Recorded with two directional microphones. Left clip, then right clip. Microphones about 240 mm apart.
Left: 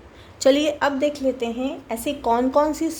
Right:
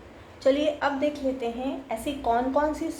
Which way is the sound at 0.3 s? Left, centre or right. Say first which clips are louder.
Left 5 dB; left.